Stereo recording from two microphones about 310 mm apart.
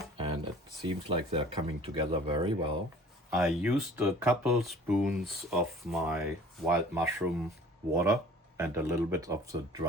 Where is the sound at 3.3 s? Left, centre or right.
Centre.